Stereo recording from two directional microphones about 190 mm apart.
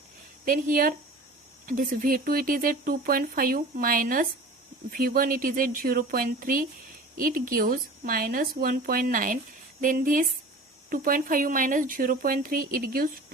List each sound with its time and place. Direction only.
0.4 s speech: 45° right (ahead or behind)